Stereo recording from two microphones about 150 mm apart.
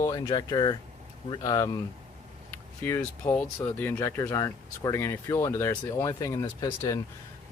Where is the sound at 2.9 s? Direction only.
15° left (ahead or behind).